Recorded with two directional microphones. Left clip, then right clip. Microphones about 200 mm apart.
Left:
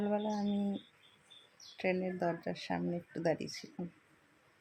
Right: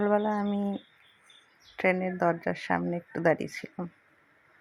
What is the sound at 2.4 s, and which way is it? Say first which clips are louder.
Speech: right 9 dB; 5° right (ahead or behind).